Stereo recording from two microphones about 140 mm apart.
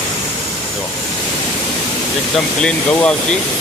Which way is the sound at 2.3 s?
5° left (ahead or behind).